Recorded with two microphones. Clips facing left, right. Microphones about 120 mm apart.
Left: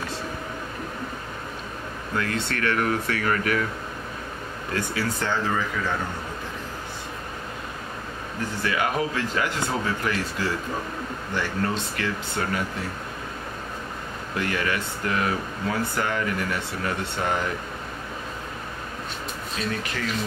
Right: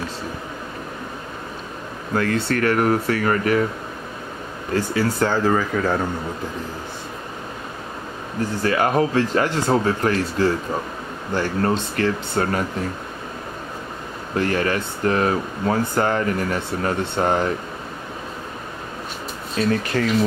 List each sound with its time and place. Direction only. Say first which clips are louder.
2.1 s speech: right 7 dB; 35° right (ahead or behind)
4.7 s speech: right 7 dB; 35° right (ahead or behind)
8.6 s speech: right 6 dB; 40° right (ahead or behind)
14.3 s speech: right 6 dB; 35° right (ahead or behind)
19.6 s speech: right 10 dB; 40° right (ahead or behind)